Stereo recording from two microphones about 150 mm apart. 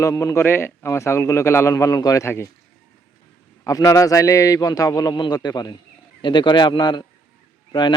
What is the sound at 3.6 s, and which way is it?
A man's voice, 20° left (ahead or behind).